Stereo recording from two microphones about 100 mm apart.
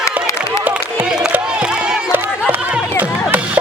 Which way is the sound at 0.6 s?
15° right (ahead or behind).